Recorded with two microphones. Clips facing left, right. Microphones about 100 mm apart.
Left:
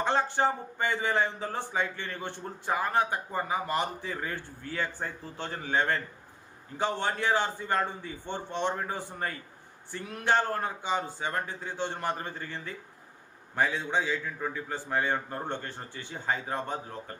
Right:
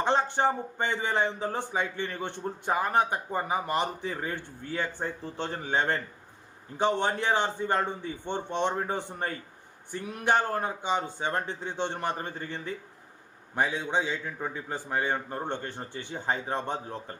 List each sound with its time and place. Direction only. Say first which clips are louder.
0.0 s speech: right 1 dB; 20° right (ahead or behind)